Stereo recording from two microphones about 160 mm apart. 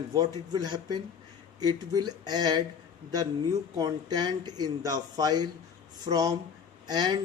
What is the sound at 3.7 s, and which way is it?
Speech, 25° right (ahead or behind).